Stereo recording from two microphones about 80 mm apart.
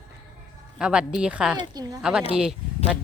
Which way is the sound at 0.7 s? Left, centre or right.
Centre.